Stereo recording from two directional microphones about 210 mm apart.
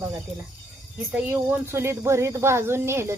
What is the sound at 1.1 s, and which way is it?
Speech, 10° right (ahead or behind).